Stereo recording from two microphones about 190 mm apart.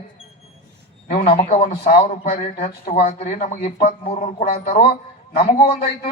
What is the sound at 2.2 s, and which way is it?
Speech, 55° left (ahead or behind).